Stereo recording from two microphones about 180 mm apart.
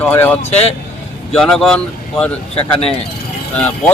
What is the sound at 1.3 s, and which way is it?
Speech, 5° left (ahead or behind).